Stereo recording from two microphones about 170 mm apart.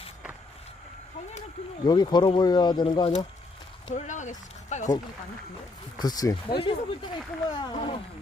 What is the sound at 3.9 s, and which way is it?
Speech, 45° left (ahead or behind).